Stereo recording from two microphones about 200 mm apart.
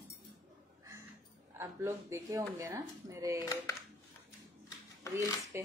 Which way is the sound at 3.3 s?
15° left (ahead or behind).